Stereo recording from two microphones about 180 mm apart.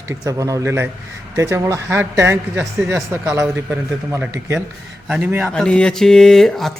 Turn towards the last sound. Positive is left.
turn(degrees=0)  # may be behind; listen again after turning